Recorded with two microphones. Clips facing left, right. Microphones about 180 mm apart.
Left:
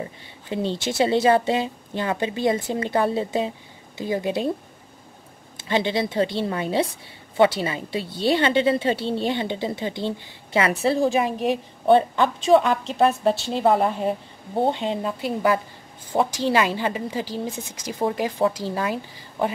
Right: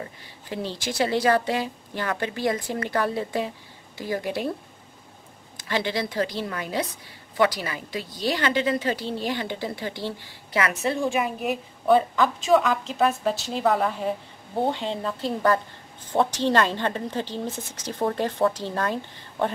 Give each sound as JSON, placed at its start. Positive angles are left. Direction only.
{"t": 0.0, "sound": "a woman's voice", "side_deg": 25}
{"t": 5.6, "sound": "a woman's voice", "side_deg": 25}